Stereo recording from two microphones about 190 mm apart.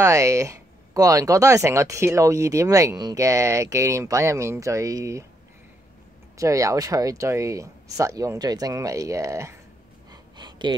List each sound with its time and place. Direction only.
0.0 s speech: 15° right (ahead or behind)
6.3 s speech: 15° right (ahead or behind)
10.3 s a sound: 25° right (ahead or behind)